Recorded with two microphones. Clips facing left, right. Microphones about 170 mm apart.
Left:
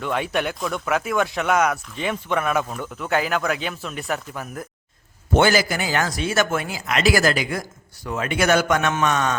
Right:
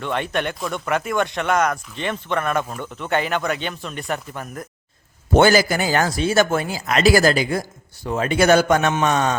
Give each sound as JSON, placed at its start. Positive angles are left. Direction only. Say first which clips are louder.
{"t": 0.0, "sound": "speech", "louder": "even", "side_deg": 5}
{"t": 5.3, "sound": "speech", "louder": "right 3 dB", "side_deg": -40}